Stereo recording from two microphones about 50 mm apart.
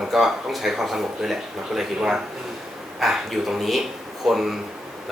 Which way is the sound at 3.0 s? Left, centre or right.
Centre.